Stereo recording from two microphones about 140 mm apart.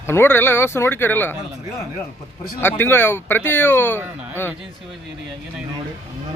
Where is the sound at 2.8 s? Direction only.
15° left (ahead or behind).